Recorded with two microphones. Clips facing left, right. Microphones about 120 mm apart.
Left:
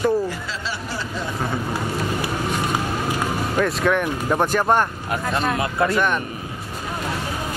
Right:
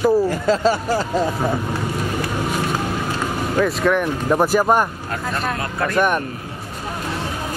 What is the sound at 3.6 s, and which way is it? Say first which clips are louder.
Speech: right 2 dB; centre (ahead or behind).